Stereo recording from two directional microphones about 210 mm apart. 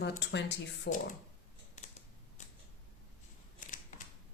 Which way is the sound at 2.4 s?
35° left (ahead or behind).